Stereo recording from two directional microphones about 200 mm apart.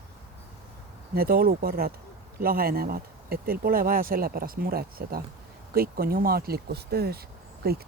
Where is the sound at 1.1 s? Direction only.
50° right (ahead or behind).